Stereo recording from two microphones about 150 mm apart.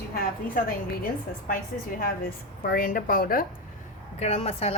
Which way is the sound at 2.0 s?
90° left.